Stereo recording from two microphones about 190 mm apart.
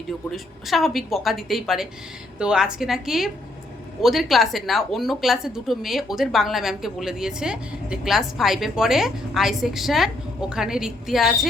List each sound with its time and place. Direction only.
0.3 s a woman's voice: centre (ahead or behind)